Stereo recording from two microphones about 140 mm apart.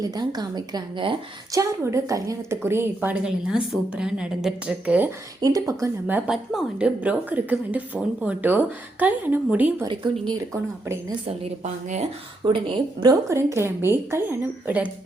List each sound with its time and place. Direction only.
0.0 s a woman's voice: 30° right (ahead or behind)
1.5 s a woman's voice: 20° right (ahead or behind)
5.4 s a woman's voice: 25° right (ahead or behind)
6.1 s a woman's voice: 10° right (ahead or behind)
9.8 s speech: 35° right (ahead or behind)
11.6 s speech: 60° right (ahead or behind)
12.5 s speech: 35° right (ahead or behind)
13.2 s a woman's voice: 20° right (ahead or behind)